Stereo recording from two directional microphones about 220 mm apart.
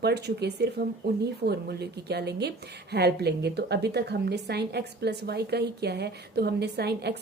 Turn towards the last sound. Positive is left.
turn(degrees=-50)  # may be behind; listen again after turning